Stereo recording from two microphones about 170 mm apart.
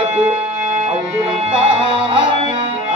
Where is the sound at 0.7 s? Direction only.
45° right (ahead or behind).